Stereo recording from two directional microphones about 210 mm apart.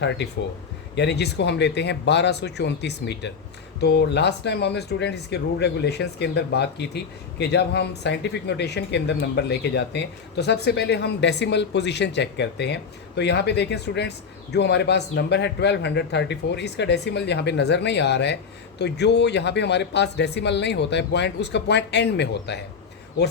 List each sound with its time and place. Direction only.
0.9 s speech: 55° left (ahead or behind)